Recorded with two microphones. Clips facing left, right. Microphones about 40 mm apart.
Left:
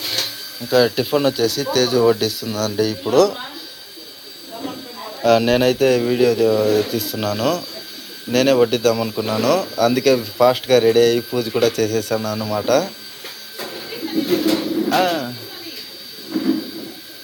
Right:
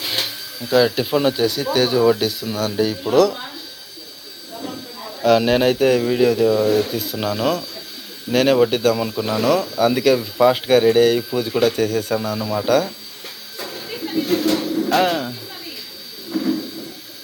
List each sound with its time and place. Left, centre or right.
0.2 s speech: centre
4.6 s a sound: left
5.2 s speech: centre
9.0 s speech: centre
9.7 s speech: centre
12.4 s speech: centre
12.6 s speech: centre
13.6 s a sound: centre
15.0 s speech: centre
16.3 s a sound: centre